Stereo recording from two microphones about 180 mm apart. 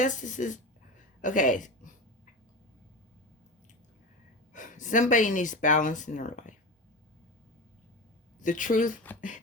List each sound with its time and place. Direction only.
0.0 s a woman's voice: 45° left (ahead or behind)
4.5 s speech: 45° left (ahead or behind)
8.4 s speech: 45° left (ahead or behind)